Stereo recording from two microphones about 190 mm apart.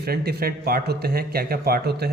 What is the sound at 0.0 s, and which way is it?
A man's voice, 55° right (ahead or behind).